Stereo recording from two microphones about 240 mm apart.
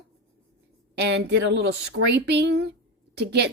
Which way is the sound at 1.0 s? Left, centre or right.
Right.